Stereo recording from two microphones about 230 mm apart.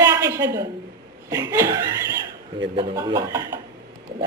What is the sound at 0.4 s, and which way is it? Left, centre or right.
Speech, right.